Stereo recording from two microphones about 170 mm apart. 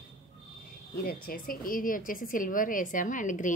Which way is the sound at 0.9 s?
60° left (ahead or behind).